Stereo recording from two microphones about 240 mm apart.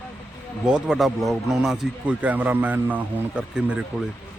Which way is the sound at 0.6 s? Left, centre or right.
Centre.